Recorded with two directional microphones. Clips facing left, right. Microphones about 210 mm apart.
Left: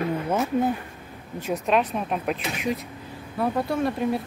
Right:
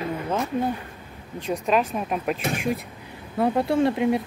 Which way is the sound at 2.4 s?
50° right (ahead or behind).